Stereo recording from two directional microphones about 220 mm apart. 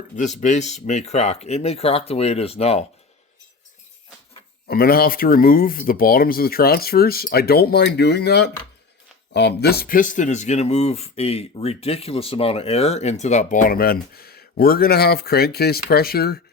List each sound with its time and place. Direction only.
0.2 s speech: 30° left (ahead or behind)
4.7 s speech: 45° left (ahead or behind)